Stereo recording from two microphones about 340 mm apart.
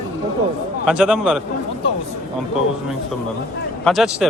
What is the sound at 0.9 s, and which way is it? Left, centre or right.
Speech, centre.